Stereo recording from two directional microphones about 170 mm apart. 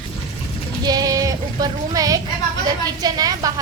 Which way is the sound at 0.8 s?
20° right (ahead or behind).